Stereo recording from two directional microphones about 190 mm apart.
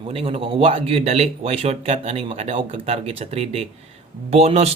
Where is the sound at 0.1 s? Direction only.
30° right (ahead or behind).